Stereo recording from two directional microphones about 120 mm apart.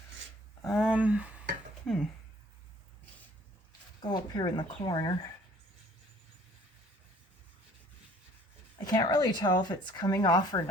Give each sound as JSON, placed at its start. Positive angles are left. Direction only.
{"t": 0.7, "sound": "speech", "side_deg": -5}
{"t": 1.9, "sound": "speech", "side_deg": 5}
{"t": 4.1, "sound": "speech", "side_deg": 40}
{"t": 8.9, "sound": "speech", "side_deg": 40}